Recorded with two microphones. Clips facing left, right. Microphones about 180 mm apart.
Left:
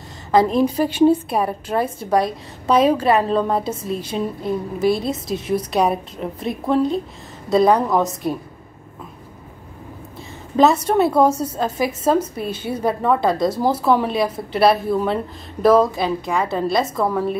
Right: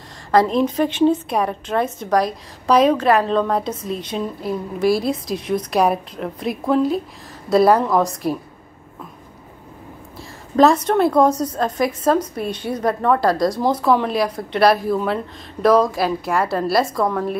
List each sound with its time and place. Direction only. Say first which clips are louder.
0.3 s a woman's voice: even; centre (ahead or behind)
10.5 s a woman's voice: right 1 dB; 5° left (ahead or behind)